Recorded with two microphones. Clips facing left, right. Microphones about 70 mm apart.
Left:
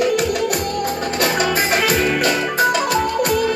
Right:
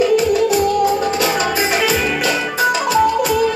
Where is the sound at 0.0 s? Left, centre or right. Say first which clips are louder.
Right 4 dB; left.